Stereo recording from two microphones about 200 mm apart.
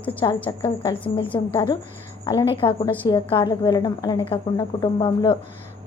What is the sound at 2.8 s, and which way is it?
Speech, 10° left (ahead or behind).